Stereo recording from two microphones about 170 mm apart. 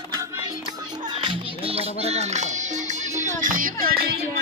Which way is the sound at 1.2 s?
30° right (ahead or behind).